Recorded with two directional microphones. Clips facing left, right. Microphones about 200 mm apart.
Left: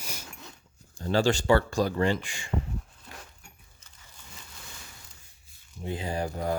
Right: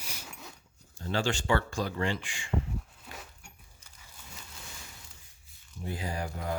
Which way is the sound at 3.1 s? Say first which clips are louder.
Even; 5° right (ahead or behind).